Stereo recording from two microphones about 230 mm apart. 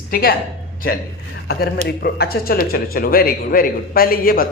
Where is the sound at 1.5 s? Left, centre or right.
Left.